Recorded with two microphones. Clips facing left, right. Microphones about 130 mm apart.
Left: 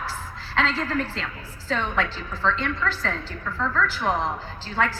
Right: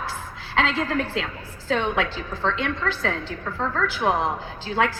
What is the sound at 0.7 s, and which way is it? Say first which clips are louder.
Speech: right 2 dB; 60° right (ahead or behind).